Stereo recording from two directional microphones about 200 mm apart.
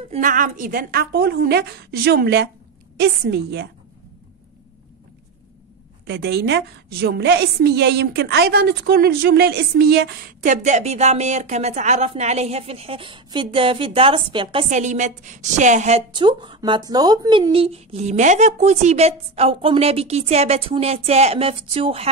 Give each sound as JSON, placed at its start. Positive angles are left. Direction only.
{"t": 0.1, "sound": "a woman's voice", "side_deg": -40}
{"t": 6.0, "sound": "a woman's voice", "side_deg": -55}
{"t": 14.8, "sound": "a woman's voice", "side_deg": -35}
{"t": 16.1, "sound": "speech", "side_deg": -25}